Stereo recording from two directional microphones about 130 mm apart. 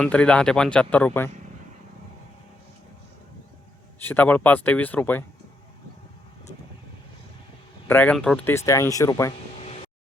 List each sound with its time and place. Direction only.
0.0 s speech: 10° left (ahead or behind)
4.0 s speech: 15° left (ahead or behind)
7.9 s speech: 15° left (ahead or behind)
8.5 s speech: 20° left (ahead or behind)
9.6 s vehicle: 55° left (ahead or behind)